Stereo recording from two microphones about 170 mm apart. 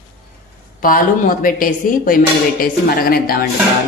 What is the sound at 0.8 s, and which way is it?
Speech, 55° left (ahead or behind).